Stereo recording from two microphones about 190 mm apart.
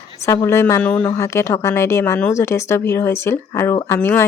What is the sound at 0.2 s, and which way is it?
Speech, 15° left (ahead or behind).